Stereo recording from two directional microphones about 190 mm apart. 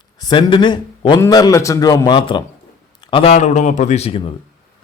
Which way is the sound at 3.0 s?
25° left (ahead or behind).